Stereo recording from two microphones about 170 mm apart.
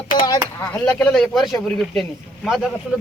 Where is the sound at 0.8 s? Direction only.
5° left (ahead or behind).